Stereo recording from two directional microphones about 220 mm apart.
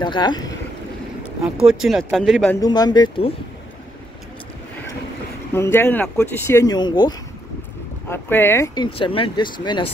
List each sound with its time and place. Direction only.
0.0 s speech: 20° left (ahead or behind)
1.2 s speech: 5° right (ahead or behind)
2.6 s speech: 20° left (ahead or behind)
5.5 s speech: 10° left (ahead or behind)
8.9 s speech: 25° left (ahead or behind)